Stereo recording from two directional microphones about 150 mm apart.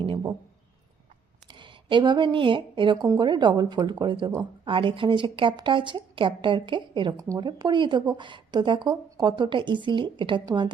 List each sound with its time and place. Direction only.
1.5 s a woman's voice: 30° right (ahead or behind)